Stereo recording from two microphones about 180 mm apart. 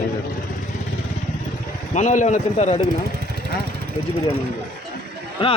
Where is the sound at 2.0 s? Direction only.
40° left (ahead or behind).